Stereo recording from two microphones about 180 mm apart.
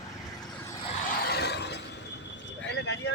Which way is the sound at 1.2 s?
65° left (ahead or behind).